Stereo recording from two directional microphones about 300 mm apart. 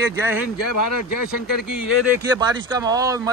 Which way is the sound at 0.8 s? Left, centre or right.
Left.